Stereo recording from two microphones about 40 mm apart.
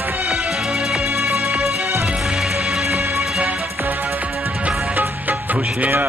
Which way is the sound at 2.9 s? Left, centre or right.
Right.